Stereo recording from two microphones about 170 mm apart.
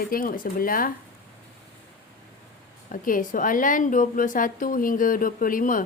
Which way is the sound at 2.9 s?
55° left (ahead or behind).